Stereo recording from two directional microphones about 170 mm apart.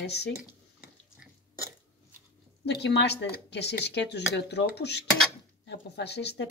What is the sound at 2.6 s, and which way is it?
Speech, 85° left.